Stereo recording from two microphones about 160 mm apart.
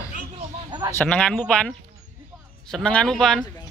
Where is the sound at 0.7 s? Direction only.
30° right (ahead or behind).